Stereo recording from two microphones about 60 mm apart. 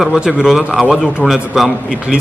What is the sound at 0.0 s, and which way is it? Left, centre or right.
A man's voice, centre.